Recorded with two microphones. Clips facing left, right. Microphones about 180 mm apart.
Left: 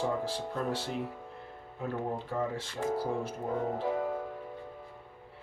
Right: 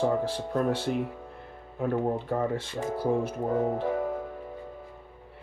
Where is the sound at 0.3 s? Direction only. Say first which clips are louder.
Right 6 dB; 60° right (ahead or behind).